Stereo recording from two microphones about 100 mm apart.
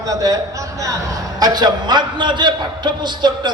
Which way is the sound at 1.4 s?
45° right (ahead or behind).